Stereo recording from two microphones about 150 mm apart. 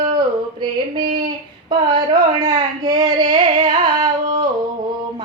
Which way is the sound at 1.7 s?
30° right (ahead or behind).